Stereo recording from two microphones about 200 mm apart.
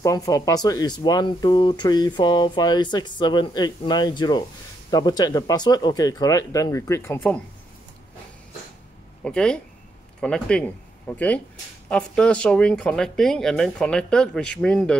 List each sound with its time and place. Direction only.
0.0 s speech: 15° left (ahead or behind)
9.2 s speech: 5° left (ahead or behind)